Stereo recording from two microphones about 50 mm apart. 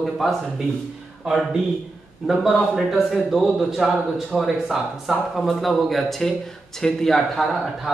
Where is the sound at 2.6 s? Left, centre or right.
Centre.